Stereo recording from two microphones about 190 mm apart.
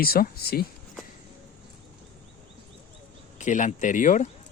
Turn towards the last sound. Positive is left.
turn(degrees=40)  # may be behind; listen again after turning